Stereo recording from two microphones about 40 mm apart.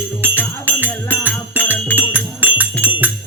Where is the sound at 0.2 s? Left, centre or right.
Right.